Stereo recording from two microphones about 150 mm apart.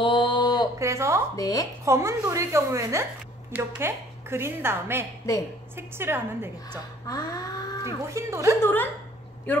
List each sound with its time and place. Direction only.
0.0 s mantra: 35° left (ahead or behind)
0.7 s a woman's voice: 20° right (ahead or behind)
1.3 s speech: 25° left (ahead or behind)
1.9 s a woman's voice: 20° right (ahead or behind)
7.1 s speech: 25° left (ahead or behind)
8.1 s a woman's voice: 20° right (ahead or behind)
9.5 s a man's voice: 10° left (ahead or behind)